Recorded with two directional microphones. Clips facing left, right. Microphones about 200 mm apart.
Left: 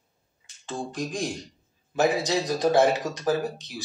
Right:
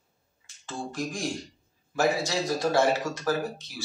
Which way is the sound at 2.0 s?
20° left (ahead or behind).